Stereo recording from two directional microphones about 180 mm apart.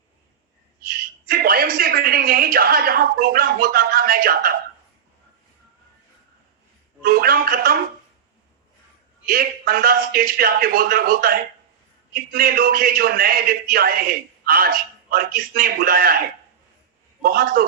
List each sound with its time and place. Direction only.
0.9 s a woman's voice: 55° right (ahead or behind)
7.0 s speech: 55° right (ahead or behind)
9.2 s a man's voice: 55° right (ahead or behind)
17.2 s a man's voice: 55° right (ahead or behind)